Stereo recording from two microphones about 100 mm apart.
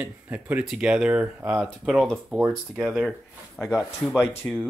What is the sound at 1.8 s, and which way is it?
Speech, centre (ahead or behind).